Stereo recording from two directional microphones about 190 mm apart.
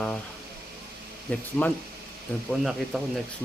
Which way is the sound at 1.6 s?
10° left (ahead or behind).